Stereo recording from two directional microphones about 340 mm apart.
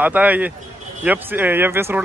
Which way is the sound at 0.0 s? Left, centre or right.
Centre.